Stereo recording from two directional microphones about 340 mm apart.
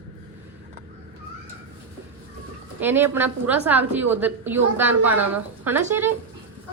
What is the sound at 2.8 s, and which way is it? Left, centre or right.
A woman's voice, centre.